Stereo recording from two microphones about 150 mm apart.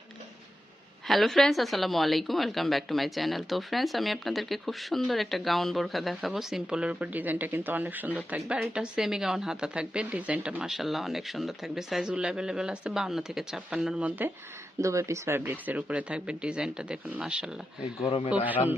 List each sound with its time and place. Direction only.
1.0 s a woman's voice: centre (ahead or behind)
14.8 s speech: 20° right (ahead or behind)
18.0 s speech: 40° left (ahead or behind)
18.3 s speech: 10° right (ahead or behind)